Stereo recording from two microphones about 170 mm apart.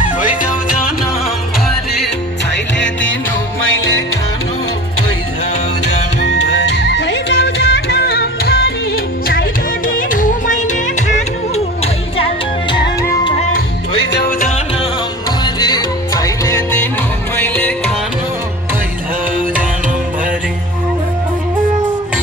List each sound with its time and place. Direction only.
0.4 s music: 55° left (ahead or behind)
2.5 s music: 90° left
6.2 s music: 90° left; by 12.3 s 40° left (ahead or behind)
15.4 s music: 25° left (ahead or behind)